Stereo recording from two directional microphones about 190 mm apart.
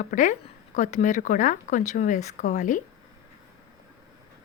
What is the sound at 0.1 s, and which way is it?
Speech, 40° left (ahead or behind).